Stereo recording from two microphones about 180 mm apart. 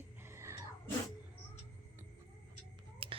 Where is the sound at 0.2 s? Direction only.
15° right (ahead or behind).